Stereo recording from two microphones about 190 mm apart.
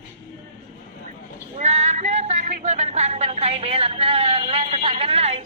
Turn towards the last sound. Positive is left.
turn(degrees=-35)  # may be behind; listen again after turning